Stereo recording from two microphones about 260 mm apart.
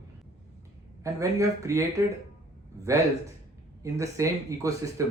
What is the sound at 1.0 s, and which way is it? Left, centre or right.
Speech, centre.